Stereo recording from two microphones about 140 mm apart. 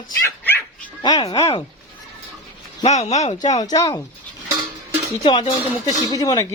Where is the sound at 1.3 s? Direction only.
45° left (ahead or behind).